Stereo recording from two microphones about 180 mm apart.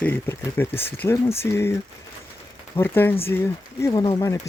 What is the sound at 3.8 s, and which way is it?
Speech, 25° left (ahead or behind).